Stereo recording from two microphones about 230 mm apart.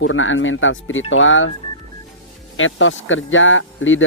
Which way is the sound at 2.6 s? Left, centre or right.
Left.